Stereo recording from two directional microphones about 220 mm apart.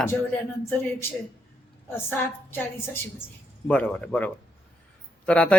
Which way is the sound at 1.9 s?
10° left (ahead or behind).